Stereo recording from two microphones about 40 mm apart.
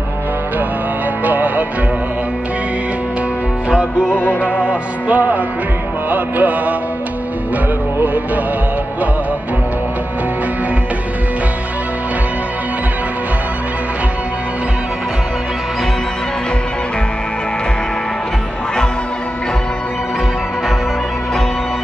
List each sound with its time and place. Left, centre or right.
1.2 s music: right
4.1 s music: left
4.6 s music: right